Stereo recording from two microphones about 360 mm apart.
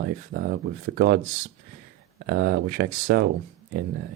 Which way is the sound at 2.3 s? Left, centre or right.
Right.